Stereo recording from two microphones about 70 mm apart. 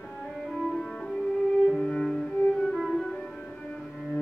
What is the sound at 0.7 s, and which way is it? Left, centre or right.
Music, centre.